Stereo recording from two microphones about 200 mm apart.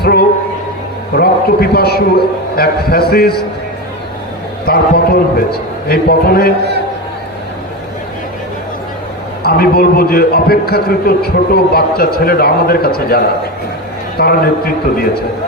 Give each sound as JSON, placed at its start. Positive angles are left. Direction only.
{"t": 0.0, "sound": "a sound", "side_deg": 50}
{"t": 1.1, "sound": "a man's voice", "side_deg": 50}
{"t": 4.6, "sound": "a man's voice", "side_deg": 50}
{"t": 9.4, "sound": "a man's voice", "side_deg": 50}